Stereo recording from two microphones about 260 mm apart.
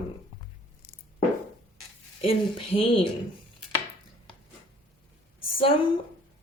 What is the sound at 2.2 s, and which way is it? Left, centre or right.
Speech, left.